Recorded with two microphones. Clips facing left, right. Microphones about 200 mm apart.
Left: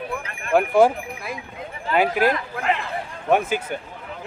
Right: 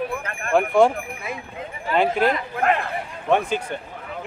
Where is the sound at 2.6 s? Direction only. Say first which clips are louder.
Right 4 dB; 50° right (ahead or behind).